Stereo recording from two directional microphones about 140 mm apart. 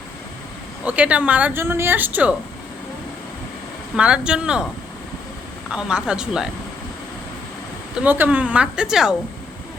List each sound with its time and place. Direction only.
0.9 s a woman's voice: 10° right (ahead or behind)
3.9 s a woman's voice: 5° right (ahead or behind)
5.7 s speech: 5° right (ahead or behind)
8.0 s a woman's voice: 15° right (ahead or behind)